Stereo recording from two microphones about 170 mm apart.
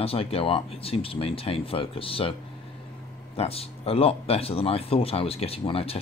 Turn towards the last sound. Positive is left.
turn(degrees=35)  # may be behind; listen again after turning